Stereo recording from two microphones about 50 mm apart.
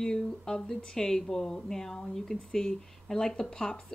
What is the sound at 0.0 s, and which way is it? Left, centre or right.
Speech, centre.